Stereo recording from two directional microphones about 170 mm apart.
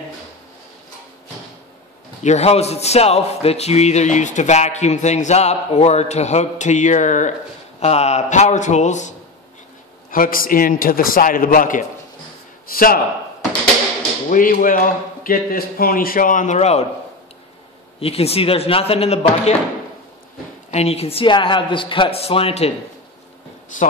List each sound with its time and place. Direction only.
2.2 s a man's voice: 40° left (ahead or behind)
10.1 s a man's voice: 55° left (ahead or behind)
14.3 s a man's voice: 50° left (ahead or behind)
18.0 s a man's voice: 35° left (ahead or behind)
20.7 s a man's voice: 40° left (ahead or behind)